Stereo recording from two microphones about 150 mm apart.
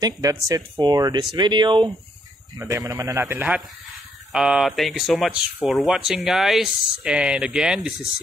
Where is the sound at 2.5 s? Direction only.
20° right (ahead or behind).